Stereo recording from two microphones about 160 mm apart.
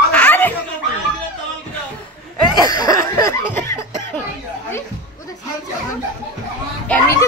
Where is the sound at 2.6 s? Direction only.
25° left (ahead or behind).